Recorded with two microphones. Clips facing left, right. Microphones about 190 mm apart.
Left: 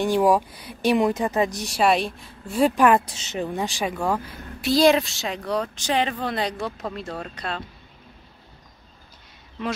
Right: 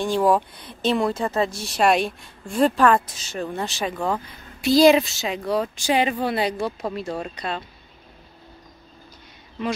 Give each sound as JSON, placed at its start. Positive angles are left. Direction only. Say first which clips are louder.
{"t": 0.0, "sound": "a woman's voice", "louder": "left 1 dB", "side_deg": 15}
{"t": 1.8, "sound": "a woman's voice", "louder": "right 1 dB", "side_deg": 0}